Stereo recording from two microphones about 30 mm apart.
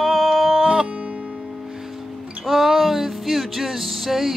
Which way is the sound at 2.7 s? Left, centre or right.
Centre.